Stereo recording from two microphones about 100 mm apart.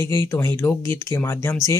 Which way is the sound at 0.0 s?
25° left (ahead or behind).